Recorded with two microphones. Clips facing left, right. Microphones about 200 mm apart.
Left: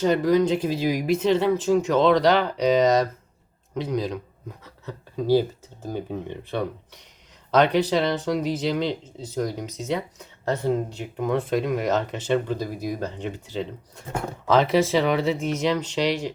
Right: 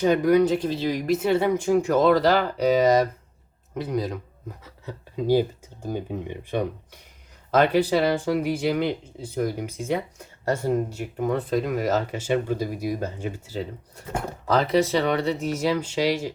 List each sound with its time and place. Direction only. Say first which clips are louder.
0.0 s speech: right 1 dB; 15° right (ahead or behind)
0.6 s speech: left 1 dB; 10° left (ahead or behind)
1.1 s speech: even; 10° right (ahead or behind)